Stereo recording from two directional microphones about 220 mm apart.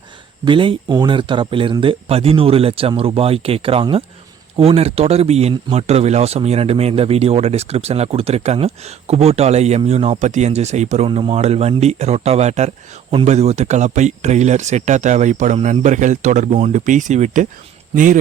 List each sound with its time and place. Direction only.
0.4 s speech: 25° right (ahead or behind)